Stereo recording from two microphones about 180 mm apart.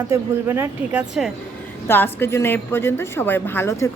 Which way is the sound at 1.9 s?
10° left (ahead or behind).